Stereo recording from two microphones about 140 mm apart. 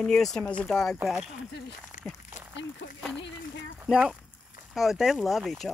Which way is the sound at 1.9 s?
65° left (ahead or behind).